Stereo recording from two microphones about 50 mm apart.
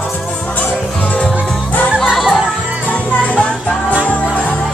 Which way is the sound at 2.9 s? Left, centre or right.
Left.